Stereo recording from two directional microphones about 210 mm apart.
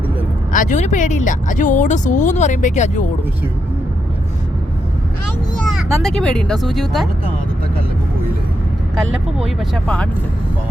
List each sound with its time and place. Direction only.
0.5 s speech: 40° left (ahead or behind)
5.5 s speech: centre (ahead or behind)
9.6 s speech: 5° left (ahead or behind)